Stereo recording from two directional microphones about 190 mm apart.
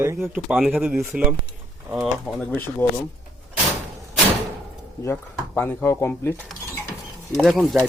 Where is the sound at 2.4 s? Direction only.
10° left (ahead or behind).